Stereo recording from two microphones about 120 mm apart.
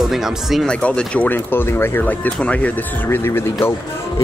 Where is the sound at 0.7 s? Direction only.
10° left (ahead or behind).